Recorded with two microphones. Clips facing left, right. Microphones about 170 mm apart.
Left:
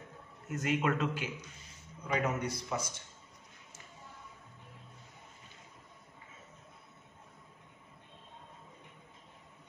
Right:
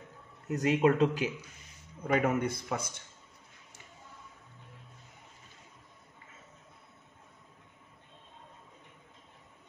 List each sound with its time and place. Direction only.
0.5 s speech: 35° right (ahead or behind)
2.0 s speech: 55° right (ahead or behind)